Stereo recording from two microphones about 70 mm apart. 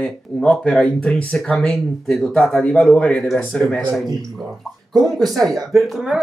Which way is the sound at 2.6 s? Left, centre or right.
Centre.